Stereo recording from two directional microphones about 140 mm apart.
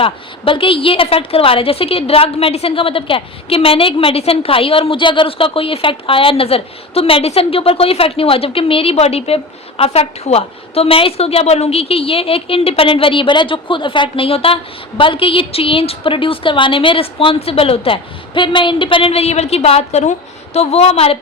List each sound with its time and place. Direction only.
0.0 s a woman's voice: 40° left (ahead or behind)